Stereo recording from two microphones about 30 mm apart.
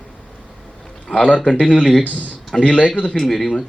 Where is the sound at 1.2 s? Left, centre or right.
Left.